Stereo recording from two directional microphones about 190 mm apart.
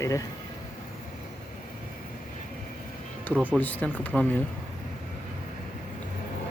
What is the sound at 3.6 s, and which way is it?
Speech, 10° left (ahead or behind).